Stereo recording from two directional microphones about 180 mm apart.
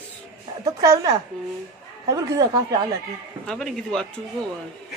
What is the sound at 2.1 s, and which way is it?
Speech, 20° right (ahead or behind).